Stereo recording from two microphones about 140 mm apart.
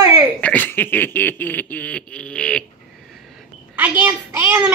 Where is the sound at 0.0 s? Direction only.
25° right (ahead or behind).